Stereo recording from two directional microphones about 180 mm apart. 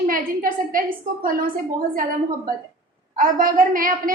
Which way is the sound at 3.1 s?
50° right (ahead or behind).